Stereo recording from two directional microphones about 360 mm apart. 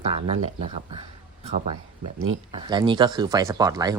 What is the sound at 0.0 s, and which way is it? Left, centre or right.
Speech, centre.